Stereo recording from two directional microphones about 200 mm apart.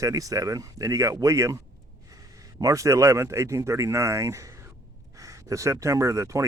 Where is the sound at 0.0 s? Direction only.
15° right (ahead or behind).